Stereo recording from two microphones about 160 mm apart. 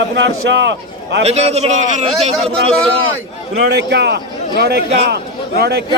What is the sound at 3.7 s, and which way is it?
A man's voice, 90° right.